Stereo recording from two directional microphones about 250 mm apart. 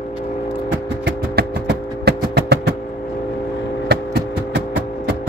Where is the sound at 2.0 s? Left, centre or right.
Right.